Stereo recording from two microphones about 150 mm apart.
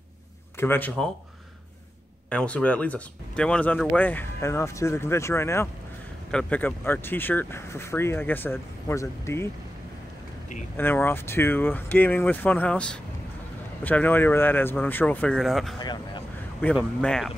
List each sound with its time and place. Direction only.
0.6 s speech: 15° left (ahead or behind)
2.2 s speech: 10° left (ahead or behind)
10.8 s speech: 15° left (ahead or behind)
15.8 s speech: 30° left (ahead or behind)
17.0 s speech: 5° left (ahead or behind)